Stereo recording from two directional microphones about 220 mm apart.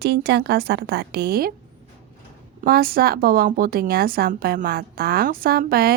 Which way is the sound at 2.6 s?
45° right (ahead or behind).